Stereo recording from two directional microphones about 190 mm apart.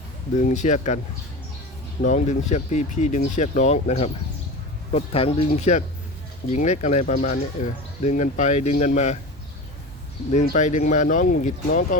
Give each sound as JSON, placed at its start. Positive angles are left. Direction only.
{"t": 0.4, "sound": "speech", "side_deg": 40}
{"t": 2.0, "sound": "speech", "side_deg": 40}
{"t": 10.3, "sound": "speech", "side_deg": 40}